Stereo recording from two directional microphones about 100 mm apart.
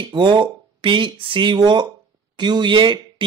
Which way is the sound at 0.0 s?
55° right (ahead or behind).